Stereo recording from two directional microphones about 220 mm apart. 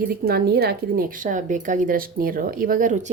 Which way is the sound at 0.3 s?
45° right (ahead or behind).